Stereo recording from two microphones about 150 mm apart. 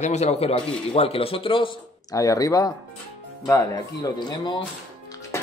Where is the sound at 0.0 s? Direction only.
50° left (ahead or behind).